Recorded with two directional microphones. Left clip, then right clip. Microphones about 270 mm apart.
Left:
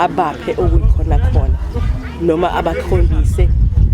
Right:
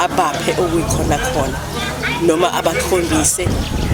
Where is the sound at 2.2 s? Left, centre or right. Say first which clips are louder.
Left 1 dB; centre.